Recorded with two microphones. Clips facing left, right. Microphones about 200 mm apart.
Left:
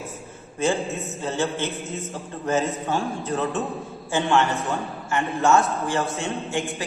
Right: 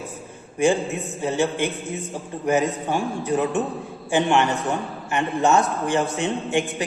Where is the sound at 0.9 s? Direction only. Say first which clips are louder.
Right 3 dB; 15° right (ahead or behind).